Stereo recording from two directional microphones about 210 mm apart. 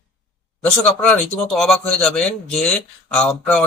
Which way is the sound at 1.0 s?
5° left (ahead or behind).